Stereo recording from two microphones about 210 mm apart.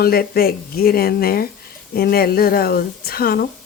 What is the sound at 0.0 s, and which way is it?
Speech, 45° left (ahead or behind).